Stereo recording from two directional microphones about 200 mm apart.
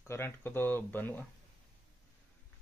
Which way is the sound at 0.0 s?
10° left (ahead or behind).